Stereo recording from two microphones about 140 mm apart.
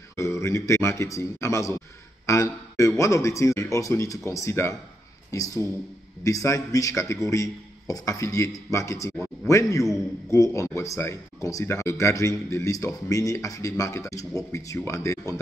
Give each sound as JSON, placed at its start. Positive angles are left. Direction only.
{"t": 0.1, "sound": "speech", "side_deg": 20}